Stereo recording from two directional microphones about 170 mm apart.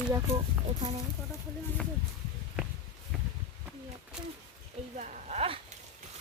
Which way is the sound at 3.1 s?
Centre (ahead or behind).